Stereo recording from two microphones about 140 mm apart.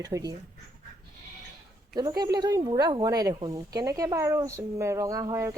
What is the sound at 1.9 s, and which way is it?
Speech, 25° right (ahead or behind).